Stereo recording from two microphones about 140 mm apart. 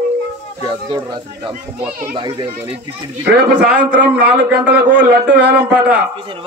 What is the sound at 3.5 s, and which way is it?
Speech, 10° right (ahead or behind).